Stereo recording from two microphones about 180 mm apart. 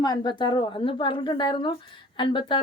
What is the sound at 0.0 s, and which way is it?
A woman's voice, 25° left (ahead or behind).